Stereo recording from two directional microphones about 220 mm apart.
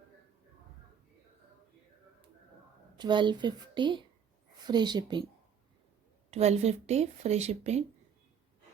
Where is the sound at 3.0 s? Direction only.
20° right (ahead or behind).